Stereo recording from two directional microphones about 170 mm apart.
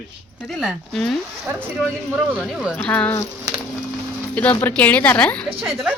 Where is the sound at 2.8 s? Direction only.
5° left (ahead or behind).